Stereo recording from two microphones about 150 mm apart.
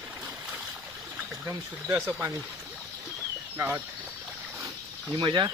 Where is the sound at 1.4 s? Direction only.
15° right (ahead or behind).